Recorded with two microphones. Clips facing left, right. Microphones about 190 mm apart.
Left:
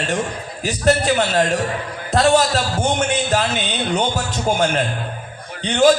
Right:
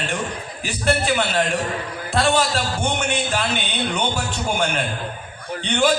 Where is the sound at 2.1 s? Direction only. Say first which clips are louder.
Left 4 dB; 40° left (ahead or behind).